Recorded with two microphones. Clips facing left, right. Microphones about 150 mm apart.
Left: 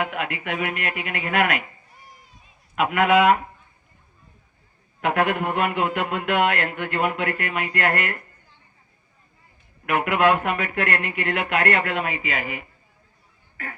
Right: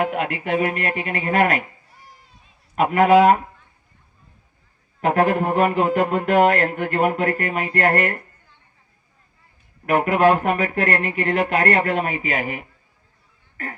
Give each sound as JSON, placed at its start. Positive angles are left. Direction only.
{"t": 0.0, "sound": "speech", "side_deg": -35}
{"t": 2.7, "sound": "speech", "side_deg": -35}
{"t": 4.9, "sound": "speech", "side_deg": -35}
{"t": 9.8, "sound": "speech", "side_deg": -35}